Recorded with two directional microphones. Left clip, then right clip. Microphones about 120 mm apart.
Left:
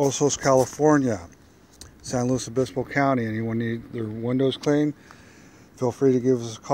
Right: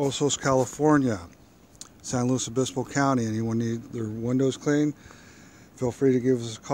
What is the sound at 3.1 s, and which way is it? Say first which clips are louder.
Speech: left 2 dB; 35° right (ahead or behind).